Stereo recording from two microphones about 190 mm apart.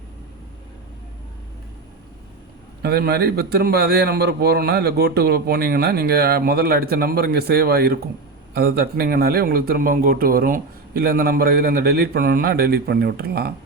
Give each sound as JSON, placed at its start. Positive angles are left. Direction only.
{"t": 2.8, "sound": "a man's voice", "side_deg": -60}